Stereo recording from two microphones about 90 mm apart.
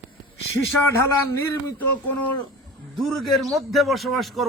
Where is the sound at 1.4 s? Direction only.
20° left (ahead or behind).